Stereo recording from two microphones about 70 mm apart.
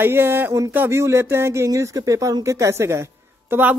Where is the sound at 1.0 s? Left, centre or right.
Right.